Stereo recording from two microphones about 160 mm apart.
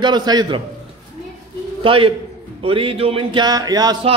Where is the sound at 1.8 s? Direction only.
35° right (ahead or behind).